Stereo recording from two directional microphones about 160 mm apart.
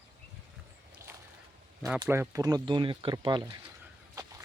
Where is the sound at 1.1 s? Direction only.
15° right (ahead or behind).